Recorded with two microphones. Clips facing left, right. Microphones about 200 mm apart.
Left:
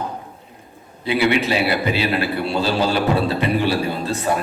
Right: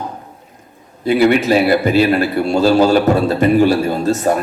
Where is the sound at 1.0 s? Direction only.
45° right (ahead or behind).